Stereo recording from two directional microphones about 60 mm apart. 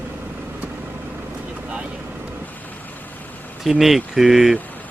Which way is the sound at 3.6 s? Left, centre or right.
Centre.